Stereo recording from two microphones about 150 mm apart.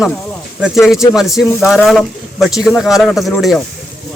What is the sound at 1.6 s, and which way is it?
Speech, centre (ahead or behind).